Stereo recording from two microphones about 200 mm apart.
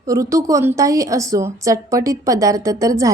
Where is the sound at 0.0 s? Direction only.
15° right (ahead or behind).